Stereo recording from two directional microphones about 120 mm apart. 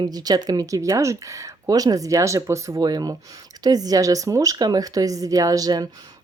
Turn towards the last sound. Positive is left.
turn(degrees=-30)  # may be behind; listen again after turning